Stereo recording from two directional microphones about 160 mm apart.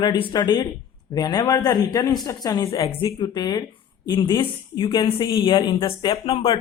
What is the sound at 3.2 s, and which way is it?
Speech, 25° left (ahead or behind).